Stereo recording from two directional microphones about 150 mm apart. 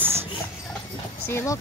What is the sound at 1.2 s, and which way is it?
Speech, 15° left (ahead or behind).